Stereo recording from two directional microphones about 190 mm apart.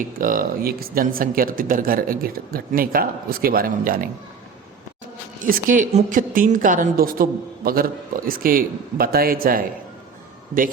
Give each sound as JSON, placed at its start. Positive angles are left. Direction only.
{"t": 0.2, "sound": "a woman's voice", "side_deg": -45}
{"t": 5.4, "sound": "a woman's voice", "side_deg": -45}